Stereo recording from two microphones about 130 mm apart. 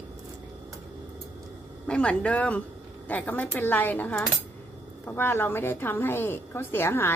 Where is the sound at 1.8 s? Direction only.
10° left (ahead or behind).